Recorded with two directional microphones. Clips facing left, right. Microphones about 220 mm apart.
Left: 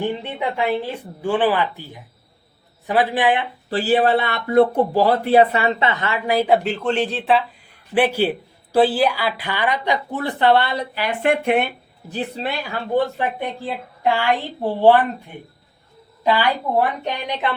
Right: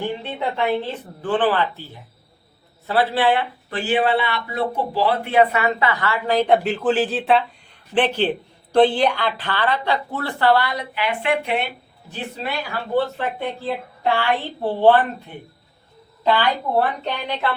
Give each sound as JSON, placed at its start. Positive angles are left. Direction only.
{"t": 0.2, "sound": "a woman's voice", "side_deg": 15}
{"t": 3.7, "sound": "a woman's voice", "side_deg": 35}
{"t": 12.9, "sound": "a woman's voice", "side_deg": 15}
{"t": 16.2, "sound": "a woman's voice", "side_deg": 10}